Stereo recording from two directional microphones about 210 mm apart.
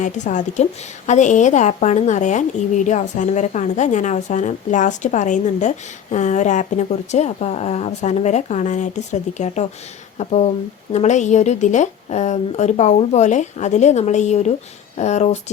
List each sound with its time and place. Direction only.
0.0 s a woman's voice: 35° left (ahead or behind)